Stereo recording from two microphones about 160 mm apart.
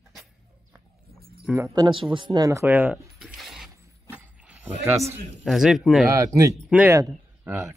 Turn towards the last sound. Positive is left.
turn(degrees=-20)  # may be behind; listen again after turning